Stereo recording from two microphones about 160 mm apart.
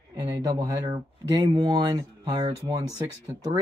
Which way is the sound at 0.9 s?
20° right (ahead or behind).